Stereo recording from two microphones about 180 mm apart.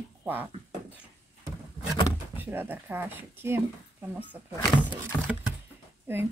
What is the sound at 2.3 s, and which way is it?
A woman's voice, 10° right (ahead or behind).